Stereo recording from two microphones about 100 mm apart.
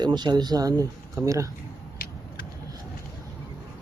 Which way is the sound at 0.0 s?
45° right (ahead or behind).